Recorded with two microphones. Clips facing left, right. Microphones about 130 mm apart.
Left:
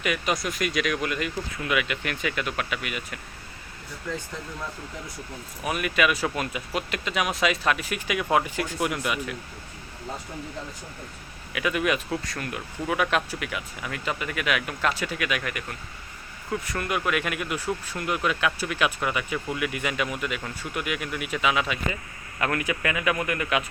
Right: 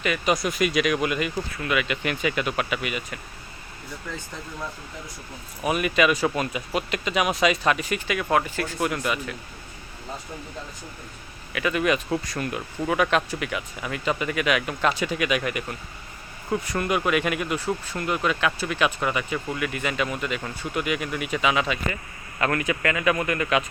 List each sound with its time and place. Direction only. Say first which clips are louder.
0.3 s speech: right 4 dB; centre (ahead or behind)
1.5 s speech: right 1 dB; 5° left (ahead or behind)
2.0 s speech: right 4 dB; 5° right (ahead or behind)
5.6 s speech: right 3 dB; 5° right (ahead or behind)
11.5 s speech: right 2 dB; 5° left (ahead or behind)
12.1 s speech: right 4 dB; 10° right (ahead or behind)
12.9 s speech: right 3 dB; 5° left (ahead or behind)
15.0 s speech: right 4 dB; 20° right (ahead or behind)
17.0 s speech: right 4 dB; 5° right (ahead or behind)